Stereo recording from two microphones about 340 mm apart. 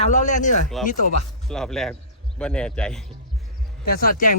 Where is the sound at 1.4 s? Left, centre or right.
Centre.